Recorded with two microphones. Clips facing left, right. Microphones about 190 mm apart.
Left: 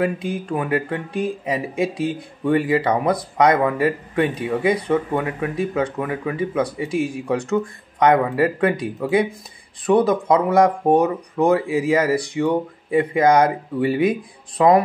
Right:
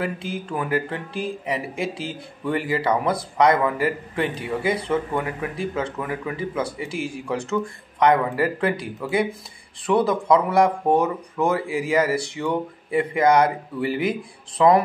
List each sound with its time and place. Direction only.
0.0 s speech: 20° left (ahead or behind)